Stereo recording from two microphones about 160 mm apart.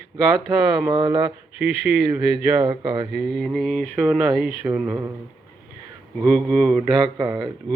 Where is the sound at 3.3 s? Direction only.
5° left (ahead or behind).